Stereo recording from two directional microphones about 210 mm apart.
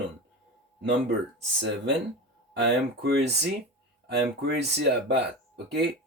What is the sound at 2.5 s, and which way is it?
Speech, 55° right (ahead or behind).